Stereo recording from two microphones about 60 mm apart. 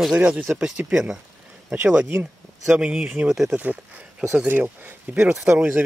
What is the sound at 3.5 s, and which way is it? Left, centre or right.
Speech, right.